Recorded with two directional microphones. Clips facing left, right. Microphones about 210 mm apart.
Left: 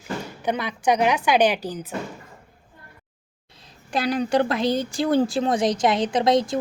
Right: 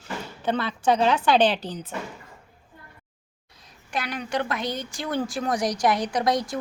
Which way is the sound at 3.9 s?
30° left (ahead or behind).